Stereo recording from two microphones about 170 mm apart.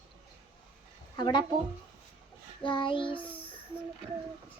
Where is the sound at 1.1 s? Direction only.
25° left (ahead or behind).